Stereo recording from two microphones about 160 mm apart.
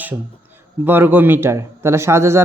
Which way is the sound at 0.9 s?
15° right (ahead or behind).